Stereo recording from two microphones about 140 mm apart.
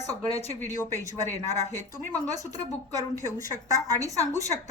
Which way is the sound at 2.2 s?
25° right (ahead or behind).